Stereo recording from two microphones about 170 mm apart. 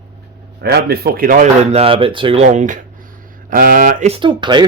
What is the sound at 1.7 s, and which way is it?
Speech, 35° right (ahead or behind).